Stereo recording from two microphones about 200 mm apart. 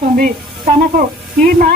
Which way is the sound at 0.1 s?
45° right (ahead or behind).